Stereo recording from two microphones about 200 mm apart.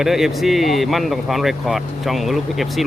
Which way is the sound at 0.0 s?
Centre (ahead or behind).